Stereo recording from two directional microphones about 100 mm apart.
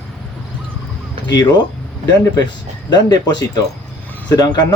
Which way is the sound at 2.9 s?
45° left (ahead or behind).